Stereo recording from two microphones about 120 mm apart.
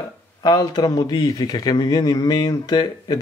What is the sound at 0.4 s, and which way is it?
Speech, 35° left (ahead or behind).